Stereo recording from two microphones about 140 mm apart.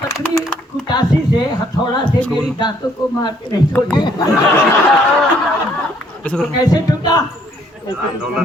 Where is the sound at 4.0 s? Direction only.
30° left (ahead or behind).